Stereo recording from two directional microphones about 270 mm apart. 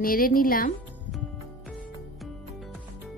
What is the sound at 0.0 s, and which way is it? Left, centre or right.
Speech, left.